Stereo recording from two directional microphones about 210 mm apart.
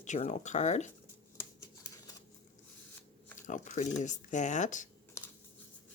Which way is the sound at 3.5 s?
35° left (ahead or behind).